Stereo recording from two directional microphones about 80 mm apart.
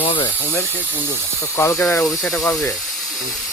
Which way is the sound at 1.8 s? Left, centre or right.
Centre.